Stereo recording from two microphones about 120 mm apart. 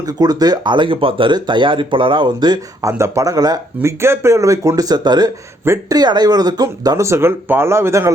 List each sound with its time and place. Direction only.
0.0 s speech: 35° right (ahead or behind)
3.8 s speech: 20° right (ahead or behind)
5.6 s speech: 20° right (ahead or behind)
6.0 s speech: 35° right (ahead or behind)